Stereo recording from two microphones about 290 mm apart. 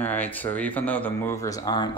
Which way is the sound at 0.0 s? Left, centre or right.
Centre.